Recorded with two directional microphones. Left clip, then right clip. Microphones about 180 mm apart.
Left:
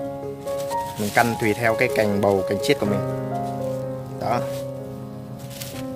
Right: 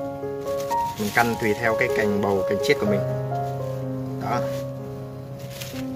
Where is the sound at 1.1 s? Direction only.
45° left (ahead or behind).